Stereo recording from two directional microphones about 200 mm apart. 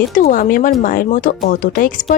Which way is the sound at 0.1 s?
40° left (ahead or behind).